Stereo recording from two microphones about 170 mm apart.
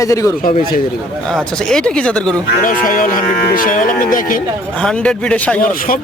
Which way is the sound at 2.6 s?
55° left (ahead or behind).